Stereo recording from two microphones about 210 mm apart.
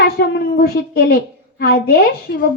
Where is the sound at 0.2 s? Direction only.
50° left (ahead or behind).